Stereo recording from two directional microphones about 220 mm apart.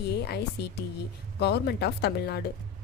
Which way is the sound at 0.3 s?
50° left (ahead or behind).